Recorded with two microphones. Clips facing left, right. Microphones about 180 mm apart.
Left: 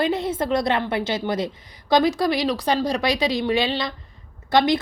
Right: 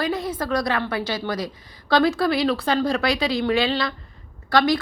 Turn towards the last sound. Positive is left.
turn(degrees=20)  # may be behind; listen again after turning